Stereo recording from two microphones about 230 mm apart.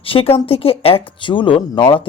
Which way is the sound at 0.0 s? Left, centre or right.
Left.